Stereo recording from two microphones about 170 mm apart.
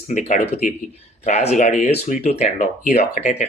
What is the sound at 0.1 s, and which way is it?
Speech, 45° left (ahead or behind).